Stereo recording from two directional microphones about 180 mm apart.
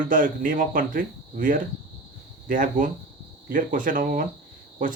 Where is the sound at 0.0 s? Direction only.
50° right (ahead or behind).